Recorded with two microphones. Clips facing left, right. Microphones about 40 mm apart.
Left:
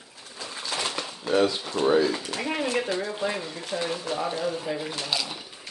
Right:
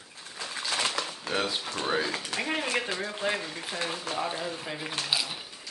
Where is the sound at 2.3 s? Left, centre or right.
Right.